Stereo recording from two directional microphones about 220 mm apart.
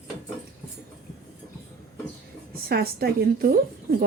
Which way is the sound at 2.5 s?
45° right (ahead or behind).